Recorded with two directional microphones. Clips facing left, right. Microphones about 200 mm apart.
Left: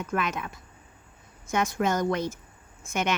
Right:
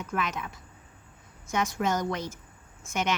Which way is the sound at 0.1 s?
55° left (ahead or behind).